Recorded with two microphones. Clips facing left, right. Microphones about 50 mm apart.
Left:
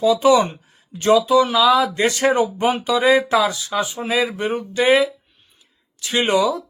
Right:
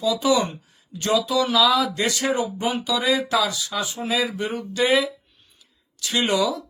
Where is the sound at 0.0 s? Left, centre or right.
Left.